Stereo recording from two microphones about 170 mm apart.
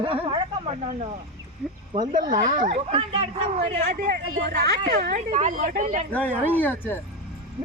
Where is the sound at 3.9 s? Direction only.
65° right (ahead or behind).